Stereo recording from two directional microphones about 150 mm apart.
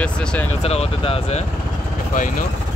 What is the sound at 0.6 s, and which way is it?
Speech, 45° left (ahead or behind).